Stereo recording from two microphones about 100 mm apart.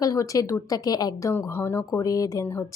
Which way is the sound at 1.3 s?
25° left (ahead or behind).